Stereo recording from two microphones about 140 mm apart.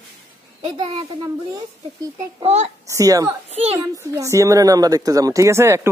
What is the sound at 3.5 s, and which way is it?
Speech, 50° right (ahead or behind).